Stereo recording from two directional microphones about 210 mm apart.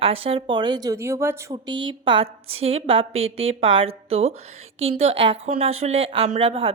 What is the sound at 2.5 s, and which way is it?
Speech, 75° right (ahead or behind).